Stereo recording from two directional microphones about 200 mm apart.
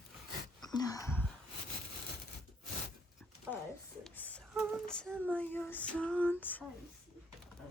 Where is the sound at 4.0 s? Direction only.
5° left (ahead or behind).